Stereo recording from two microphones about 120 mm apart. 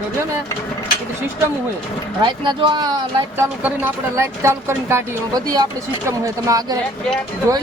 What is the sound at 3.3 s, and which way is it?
Speech, 15° right (ahead or behind).